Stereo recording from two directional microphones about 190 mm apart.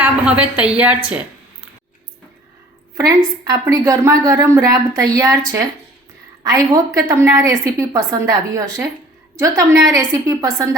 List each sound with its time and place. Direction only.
0.0 s a woman's voice: 5° right (ahead or behind)
3.4 s a woman's voice: 15° right (ahead or behind)
6.4 s a woman's voice: 20° right (ahead or behind)